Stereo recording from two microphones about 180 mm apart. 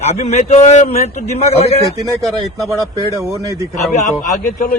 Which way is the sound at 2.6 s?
Centre (ahead or behind).